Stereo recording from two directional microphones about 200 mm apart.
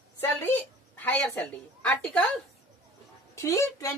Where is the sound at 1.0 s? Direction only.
10° left (ahead or behind).